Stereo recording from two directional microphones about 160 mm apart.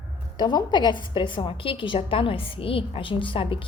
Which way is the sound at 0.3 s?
25° left (ahead or behind).